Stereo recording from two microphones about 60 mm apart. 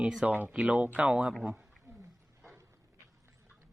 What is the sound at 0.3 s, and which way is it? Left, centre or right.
Speech, right.